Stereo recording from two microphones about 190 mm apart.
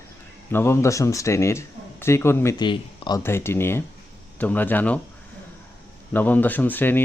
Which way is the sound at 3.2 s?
15° left (ahead or behind).